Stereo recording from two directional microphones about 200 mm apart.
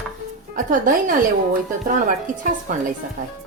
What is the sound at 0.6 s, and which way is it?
Speech, 45° right (ahead or behind).